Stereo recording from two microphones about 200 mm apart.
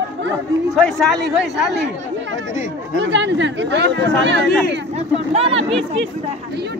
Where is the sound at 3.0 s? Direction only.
60° right (ahead or behind).